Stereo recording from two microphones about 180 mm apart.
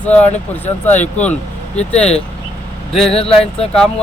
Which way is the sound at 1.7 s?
35° left (ahead or behind).